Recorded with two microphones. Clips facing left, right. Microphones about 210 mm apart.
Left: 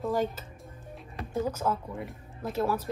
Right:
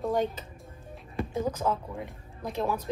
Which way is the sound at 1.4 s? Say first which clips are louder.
Even; 10° left (ahead or behind).